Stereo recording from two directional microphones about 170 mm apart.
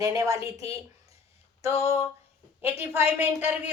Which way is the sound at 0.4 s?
35° left (ahead or behind).